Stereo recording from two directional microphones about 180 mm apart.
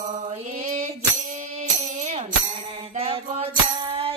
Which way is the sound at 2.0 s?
40° right (ahead or behind).